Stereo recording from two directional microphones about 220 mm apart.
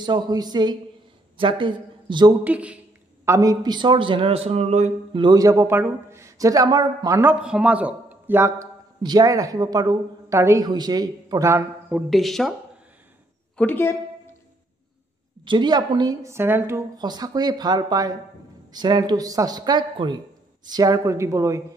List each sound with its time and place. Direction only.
0.0 s a man's voice: 20° right (ahead or behind)
2.4 s a man's voice: 5° right (ahead or behind)
12.1 s speech: centre (ahead or behind)
13.6 s speech: 10° left (ahead or behind)
15.4 s a man's voice: 20° right (ahead or behind)